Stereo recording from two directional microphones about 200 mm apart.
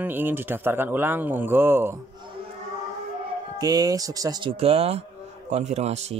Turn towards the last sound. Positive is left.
turn(degrees=-35)  # may be behind; listen again after turning